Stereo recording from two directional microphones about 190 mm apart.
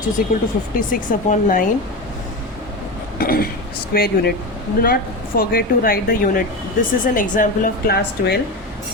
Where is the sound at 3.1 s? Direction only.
50° left (ahead or behind).